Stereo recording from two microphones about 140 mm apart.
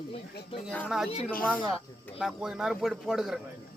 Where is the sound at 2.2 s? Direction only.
5° right (ahead or behind).